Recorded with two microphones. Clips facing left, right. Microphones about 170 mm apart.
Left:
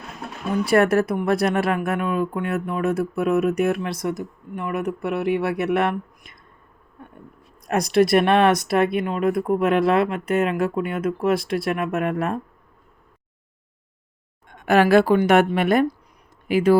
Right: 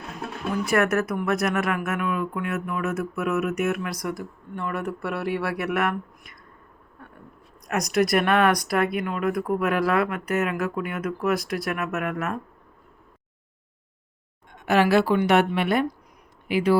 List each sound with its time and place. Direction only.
0.6 s speech: 30° left (ahead or behind)
7.0 s a sound: 20° left (ahead or behind)
7.7 s speech: 30° left (ahead or behind)
14.5 s a woman's voice: 50° left (ahead or behind)